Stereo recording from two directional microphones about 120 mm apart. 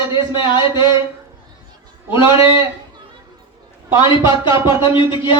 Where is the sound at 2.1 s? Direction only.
45° left (ahead or behind).